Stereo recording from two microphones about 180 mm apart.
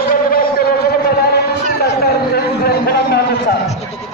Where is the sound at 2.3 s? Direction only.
60° left (ahead or behind).